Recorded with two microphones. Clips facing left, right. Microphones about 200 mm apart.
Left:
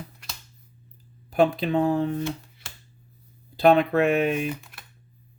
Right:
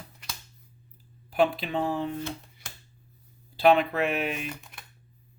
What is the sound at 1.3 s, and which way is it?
Speech, 45° left (ahead or behind).